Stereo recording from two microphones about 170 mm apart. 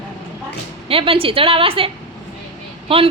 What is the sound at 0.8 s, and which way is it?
A woman's voice, 35° right (ahead or behind).